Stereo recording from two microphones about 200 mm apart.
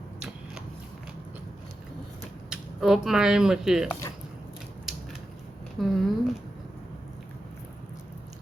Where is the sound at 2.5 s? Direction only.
Centre (ahead or behind).